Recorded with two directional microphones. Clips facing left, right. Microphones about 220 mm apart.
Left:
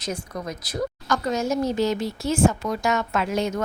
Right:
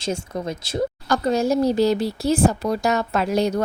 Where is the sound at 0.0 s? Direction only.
25° right (ahead or behind).